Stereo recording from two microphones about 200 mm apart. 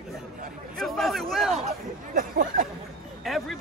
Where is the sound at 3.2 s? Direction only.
Centre (ahead or behind).